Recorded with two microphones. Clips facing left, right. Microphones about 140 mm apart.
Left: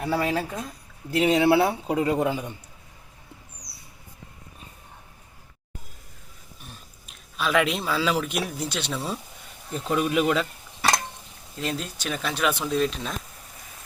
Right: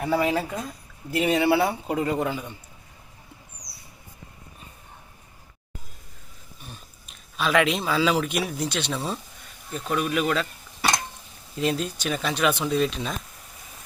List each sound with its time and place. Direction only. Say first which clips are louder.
0.2 s speech: right 2 dB; 15° right (ahead or behind)
1.3 s speech: left 1 dB; centre (ahead or behind)
2.2 s a man's voice: left 3 dB; 10° left (ahead or behind)
6.7 s speech: right 3 dB; centre (ahead or behind)
9.7 s speech: left 2 dB; 20° left (ahead or behind)
10.8 s a sound: left 1 dB; centre (ahead or behind)
11.5 s speech: right 5 dB; 5° right (ahead or behind)